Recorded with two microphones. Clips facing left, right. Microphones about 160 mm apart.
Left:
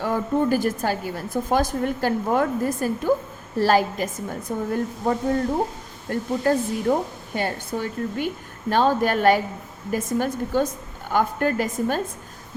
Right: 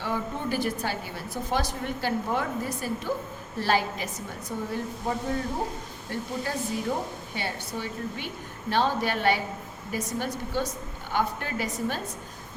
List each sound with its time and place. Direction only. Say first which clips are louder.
0.0 s a woman's voice: left 8 dB; 45° left (ahead or behind)